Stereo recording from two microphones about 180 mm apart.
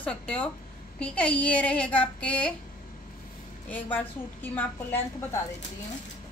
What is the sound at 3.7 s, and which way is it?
A woman's voice, 10° left (ahead or behind).